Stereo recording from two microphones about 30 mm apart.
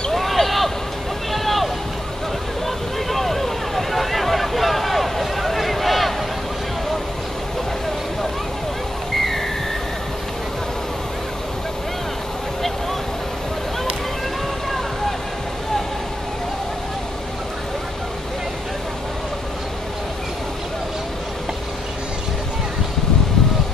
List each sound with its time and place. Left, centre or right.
0.1 s basketball bounce: centre
1.3 s vehicle: centre